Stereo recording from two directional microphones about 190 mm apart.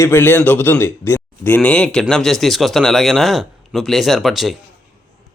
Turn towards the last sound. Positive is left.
turn(degrees=0)  # may be behind; listen again after turning